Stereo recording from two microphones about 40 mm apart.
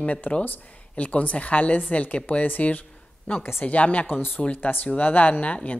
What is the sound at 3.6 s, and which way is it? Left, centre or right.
Speech, left.